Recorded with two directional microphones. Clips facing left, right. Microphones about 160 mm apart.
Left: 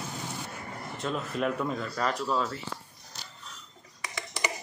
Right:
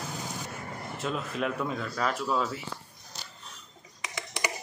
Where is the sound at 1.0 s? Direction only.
Centre (ahead or behind).